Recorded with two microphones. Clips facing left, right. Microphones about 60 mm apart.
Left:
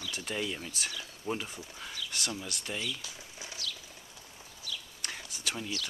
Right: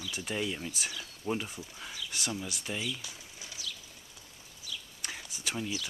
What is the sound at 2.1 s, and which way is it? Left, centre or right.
Speech, centre.